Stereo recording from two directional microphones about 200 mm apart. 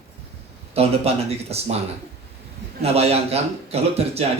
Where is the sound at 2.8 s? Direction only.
30° right (ahead or behind).